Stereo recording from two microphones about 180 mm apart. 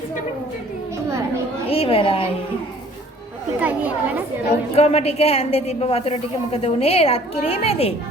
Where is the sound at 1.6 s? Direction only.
30° left (ahead or behind).